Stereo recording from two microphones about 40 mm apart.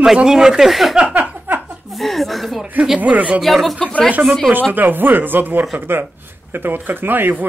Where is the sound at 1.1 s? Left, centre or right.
Right.